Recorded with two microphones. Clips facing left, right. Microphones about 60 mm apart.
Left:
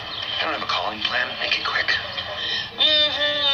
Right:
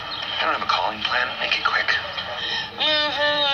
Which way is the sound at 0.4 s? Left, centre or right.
Right.